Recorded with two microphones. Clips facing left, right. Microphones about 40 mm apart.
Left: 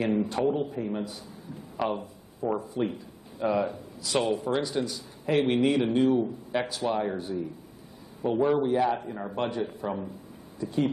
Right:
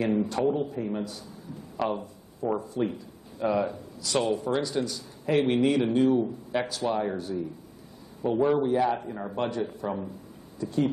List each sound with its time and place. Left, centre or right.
0.0 s a man's voice: centre
0.7 s a man's voice: centre
1.8 s a man's voice: centre
9.3 s a man's voice: centre